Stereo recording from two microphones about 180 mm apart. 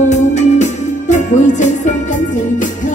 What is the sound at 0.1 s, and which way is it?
Music, 40° left (ahead or behind).